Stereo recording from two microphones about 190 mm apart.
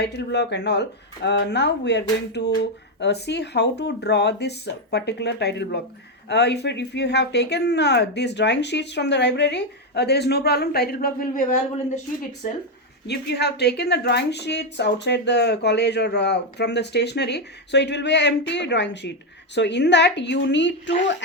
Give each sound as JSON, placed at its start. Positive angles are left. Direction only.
{"t": 0.0, "sound": "speech", "side_deg": 60}
{"t": 13.1, "sound": "speech", "side_deg": 60}